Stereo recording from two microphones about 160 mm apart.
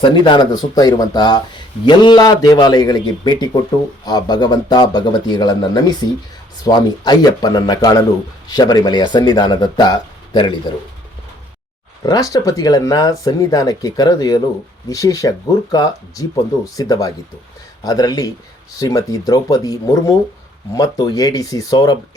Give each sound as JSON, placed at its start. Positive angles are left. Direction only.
{"t": 0.0, "sound": "speech", "side_deg": 30}
{"t": 12.0, "sound": "speech", "side_deg": 25}